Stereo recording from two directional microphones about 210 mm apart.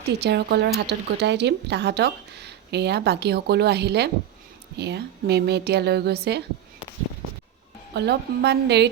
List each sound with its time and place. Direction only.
0.2 s speech: 50° right (ahead or behind)
7.9 s speech: 50° right (ahead or behind)